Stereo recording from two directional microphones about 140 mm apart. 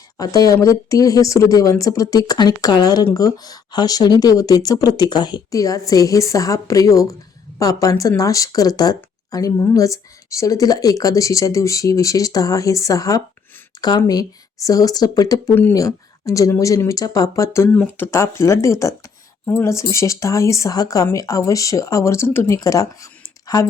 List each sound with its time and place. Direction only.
0.2 s speech: 25° left (ahead or behind)